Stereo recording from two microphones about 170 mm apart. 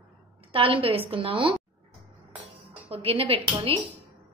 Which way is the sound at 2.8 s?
35° right (ahead or behind).